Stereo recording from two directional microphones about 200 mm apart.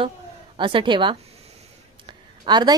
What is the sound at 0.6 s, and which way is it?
Speech, 25° right (ahead or behind).